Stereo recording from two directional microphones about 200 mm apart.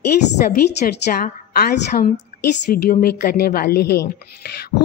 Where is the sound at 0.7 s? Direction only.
50° left (ahead or behind).